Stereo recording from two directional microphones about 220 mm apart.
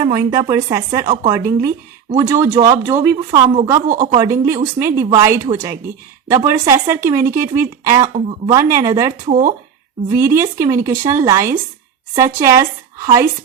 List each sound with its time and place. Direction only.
0.0 s speech: 15° right (ahead or behind)
9.2 s speech: 40° right (ahead or behind)
10.2 s speech: 10° right (ahead or behind)